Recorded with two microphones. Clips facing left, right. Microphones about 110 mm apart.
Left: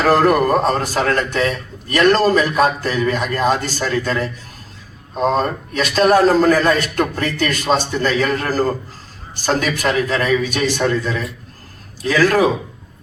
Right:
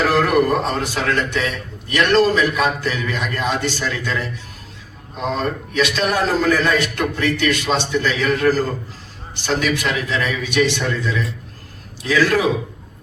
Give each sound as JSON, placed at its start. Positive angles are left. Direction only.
{"t": 0.1, "sound": "a man's voice", "side_deg": 40}